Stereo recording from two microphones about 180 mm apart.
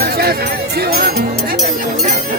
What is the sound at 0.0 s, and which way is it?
Music, 60° right (ahead or behind).